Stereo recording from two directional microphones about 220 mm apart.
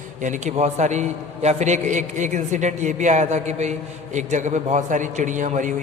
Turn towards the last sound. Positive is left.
turn(degrees=-35)  # may be behind; listen again after turning